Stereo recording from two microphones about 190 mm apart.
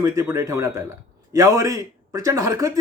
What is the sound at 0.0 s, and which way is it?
A man's voice, 15° right (ahead or behind).